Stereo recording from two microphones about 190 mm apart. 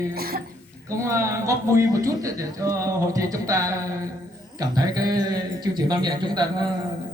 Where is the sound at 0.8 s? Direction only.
15° right (ahead or behind).